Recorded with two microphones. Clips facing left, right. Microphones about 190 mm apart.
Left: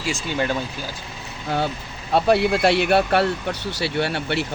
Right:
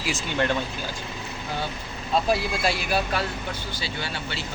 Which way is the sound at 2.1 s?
65° left (ahead or behind).